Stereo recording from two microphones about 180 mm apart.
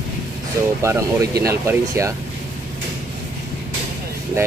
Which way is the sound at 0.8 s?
15° right (ahead or behind).